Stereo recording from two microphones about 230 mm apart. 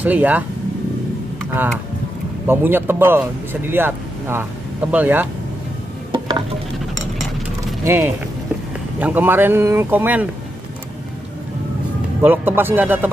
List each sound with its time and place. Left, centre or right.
0.0 s speech: centre
2.4 s speech: centre
6.1 s a sound: right
7.8 s speech: centre
12.2 s speech: centre